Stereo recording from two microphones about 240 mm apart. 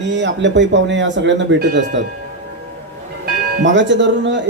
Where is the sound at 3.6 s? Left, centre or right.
Right.